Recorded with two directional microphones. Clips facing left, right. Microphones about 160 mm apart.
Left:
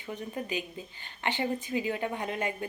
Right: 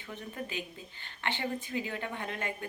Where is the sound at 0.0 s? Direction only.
15° left (ahead or behind).